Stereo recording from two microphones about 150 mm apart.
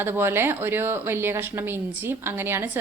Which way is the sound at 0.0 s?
15° right (ahead or behind).